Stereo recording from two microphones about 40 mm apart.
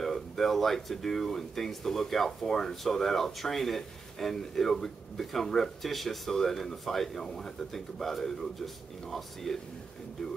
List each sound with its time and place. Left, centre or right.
0.0 s speech: centre